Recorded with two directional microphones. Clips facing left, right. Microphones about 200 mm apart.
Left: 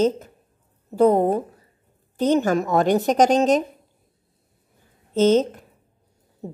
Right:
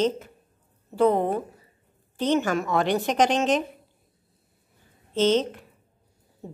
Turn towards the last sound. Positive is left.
turn(degrees=45)  # may be behind; listen again after turning